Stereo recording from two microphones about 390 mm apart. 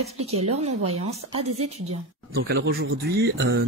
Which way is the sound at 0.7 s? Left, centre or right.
Right.